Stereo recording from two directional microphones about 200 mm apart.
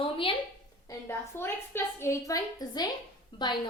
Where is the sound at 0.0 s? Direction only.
25° left (ahead or behind).